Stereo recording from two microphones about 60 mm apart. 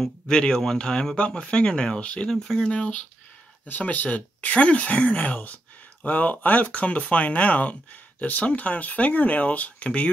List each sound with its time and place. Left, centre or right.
0.0 s speech: centre